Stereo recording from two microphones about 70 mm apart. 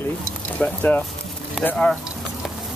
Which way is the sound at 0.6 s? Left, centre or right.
Centre.